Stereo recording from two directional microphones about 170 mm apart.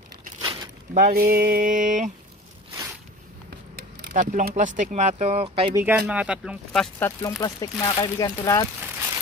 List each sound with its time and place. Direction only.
0.4 s a sound: 25° right (ahead or behind)
0.9 s mantra: 55° right (ahead or behind)
3.4 s a sound: 70° right (ahead or behind)
4.1 s speech: 50° right (ahead or behind)
5.8 s speech: 10° right (ahead or behind)
7.1 s speech: 20° left (ahead or behind)